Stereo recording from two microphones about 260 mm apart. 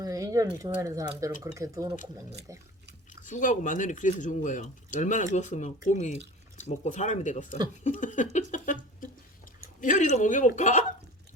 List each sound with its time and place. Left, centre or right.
0.0 s a sound: centre
0.6 s speech: centre
3.2 s speech: left